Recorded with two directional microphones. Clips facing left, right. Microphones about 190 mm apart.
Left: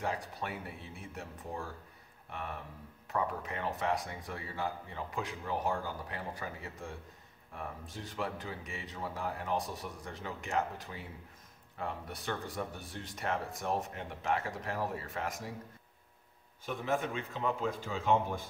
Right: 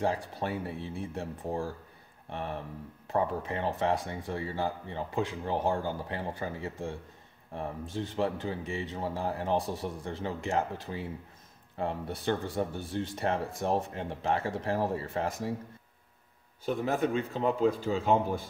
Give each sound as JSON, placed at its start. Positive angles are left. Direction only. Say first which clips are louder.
{"t": 0.0, "sound": "speech", "louder": "right 6 dB", "side_deg": -30}
{"t": 16.6, "sound": "a man's voice", "louder": "right 5 dB", "side_deg": -35}